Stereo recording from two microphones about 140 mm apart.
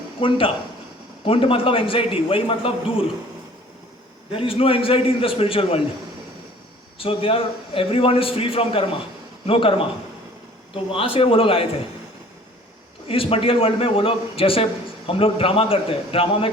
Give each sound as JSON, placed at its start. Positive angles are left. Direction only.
{"t": 0.2, "sound": "a man's voice", "side_deg": 40}
{"t": 4.3, "sound": "a man's voice", "side_deg": 40}
{"t": 7.0, "sound": "a man's voice", "side_deg": 40}
{"t": 13.1, "sound": "a man's voice", "side_deg": 40}